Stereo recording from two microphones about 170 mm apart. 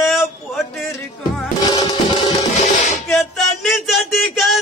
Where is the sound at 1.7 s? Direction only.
25° left (ahead or behind).